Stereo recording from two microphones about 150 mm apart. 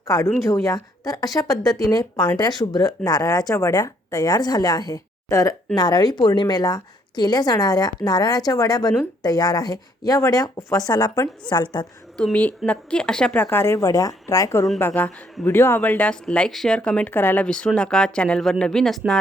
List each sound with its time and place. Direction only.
0.4 s a woman's voice: 20° left (ahead or behind)
12.1 s speech: 5° left (ahead or behind)